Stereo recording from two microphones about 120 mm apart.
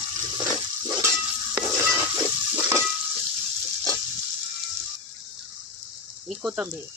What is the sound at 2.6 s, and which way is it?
Frying, 20° right (ahead or behind).